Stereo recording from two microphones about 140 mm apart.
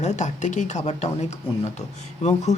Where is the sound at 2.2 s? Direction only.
50° left (ahead or behind).